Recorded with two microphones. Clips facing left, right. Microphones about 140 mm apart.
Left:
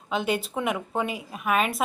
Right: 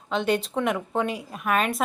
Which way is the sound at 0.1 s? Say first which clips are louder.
Right 2 dB; 5° left (ahead or behind).